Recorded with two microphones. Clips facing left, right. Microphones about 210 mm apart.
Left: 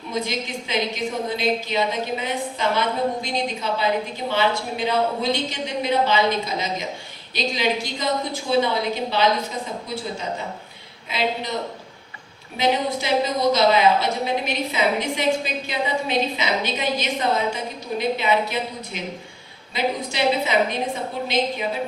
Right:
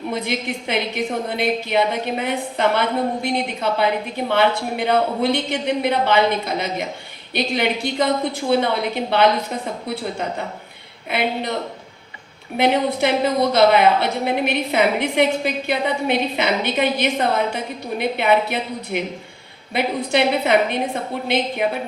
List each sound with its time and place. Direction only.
0.1 s a woman's voice: 60° right (ahead or behind)
12.5 s a woman's voice: 60° right (ahead or behind)